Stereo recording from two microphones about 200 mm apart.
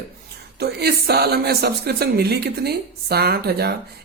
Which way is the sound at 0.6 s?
50° right (ahead or behind).